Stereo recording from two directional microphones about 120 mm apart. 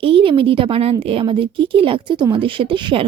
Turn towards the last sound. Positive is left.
turn(degrees=-40)  # may be behind; listen again after turning